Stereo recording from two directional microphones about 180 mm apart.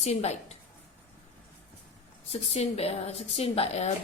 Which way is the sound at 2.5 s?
35° left (ahead or behind).